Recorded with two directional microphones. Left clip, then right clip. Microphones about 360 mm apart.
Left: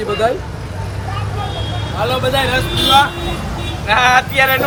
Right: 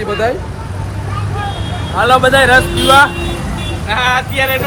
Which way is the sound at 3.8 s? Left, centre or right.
Centre.